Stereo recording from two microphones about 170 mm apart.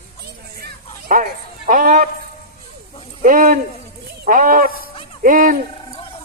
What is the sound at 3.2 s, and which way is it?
A man's voice, 55° right (ahead or behind).